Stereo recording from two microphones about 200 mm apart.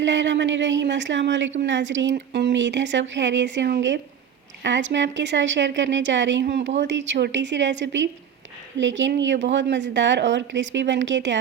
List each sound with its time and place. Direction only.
0.0 s speech: 65° right (ahead or behind)